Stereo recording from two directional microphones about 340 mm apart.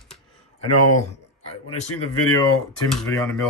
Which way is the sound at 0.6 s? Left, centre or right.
Left.